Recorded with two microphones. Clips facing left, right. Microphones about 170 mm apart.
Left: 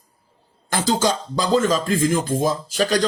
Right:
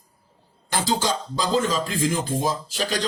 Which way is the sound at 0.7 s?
50° left (ahead or behind).